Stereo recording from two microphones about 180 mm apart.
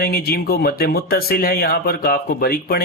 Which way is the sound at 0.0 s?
55° left (ahead or behind).